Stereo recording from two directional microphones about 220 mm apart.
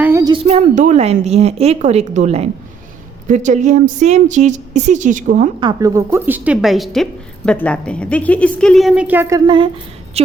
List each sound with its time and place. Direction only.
0.0 s a sound: 10° right (ahead or behind)
0.3 s a woman's voice: 25° right (ahead or behind)
5.5 s speech: 15° right (ahead or behind)